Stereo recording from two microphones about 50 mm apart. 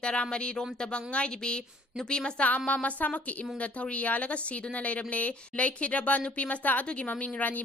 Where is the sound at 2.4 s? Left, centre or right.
Left.